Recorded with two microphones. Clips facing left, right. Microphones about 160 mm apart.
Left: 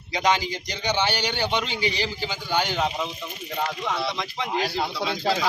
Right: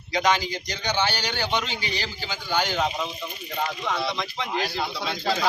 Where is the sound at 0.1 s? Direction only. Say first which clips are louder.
Even; 10° left (ahead or behind).